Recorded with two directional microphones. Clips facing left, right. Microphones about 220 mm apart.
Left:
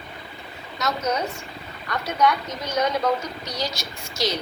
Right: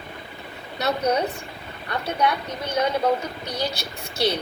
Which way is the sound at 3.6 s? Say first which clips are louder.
Right 2 dB; 60° right (ahead or behind).